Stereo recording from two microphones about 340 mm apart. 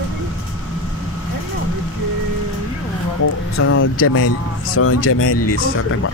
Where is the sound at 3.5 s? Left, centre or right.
Left.